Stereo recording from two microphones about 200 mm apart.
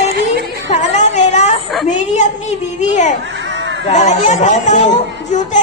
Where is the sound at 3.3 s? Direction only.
65° right (ahead or behind).